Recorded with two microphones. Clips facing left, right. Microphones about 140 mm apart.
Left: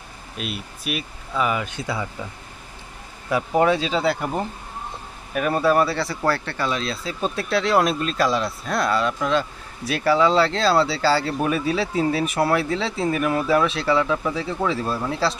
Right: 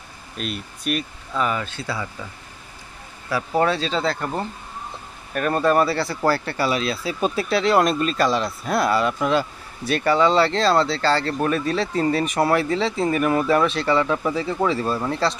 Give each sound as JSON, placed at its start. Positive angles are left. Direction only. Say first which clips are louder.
{"t": 0.4, "sound": "speech", "louder": "right 1 dB", "side_deg": 5}
{"t": 3.3, "sound": "speech", "louder": "left 2 dB", "side_deg": 15}